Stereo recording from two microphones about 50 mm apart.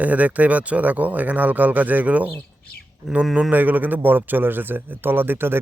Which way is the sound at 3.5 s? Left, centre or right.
Right.